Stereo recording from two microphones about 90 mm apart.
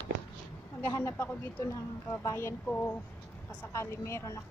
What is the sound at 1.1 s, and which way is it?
A woman's voice, 20° left (ahead or behind).